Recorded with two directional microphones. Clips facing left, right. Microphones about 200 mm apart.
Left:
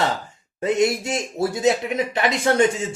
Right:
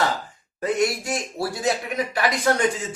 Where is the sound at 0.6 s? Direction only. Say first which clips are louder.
Left 3 dB; 25° left (ahead or behind).